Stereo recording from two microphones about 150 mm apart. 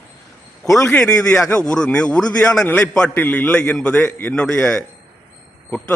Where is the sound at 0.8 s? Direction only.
10° left (ahead or behind).